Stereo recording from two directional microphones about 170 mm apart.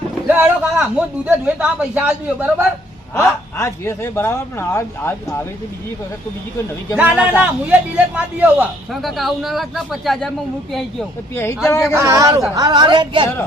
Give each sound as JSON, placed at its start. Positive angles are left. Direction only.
{"t": 0.3, "sound": "speech", "side_deg": -10}
{"t": 3.2, "sound": "speech", "side_deg": 15}
{"t": 6.9, "sound": "a man's voice", "side_deg": -5}
{"t": 11.9, "sound": "speech", "side_deg": -20}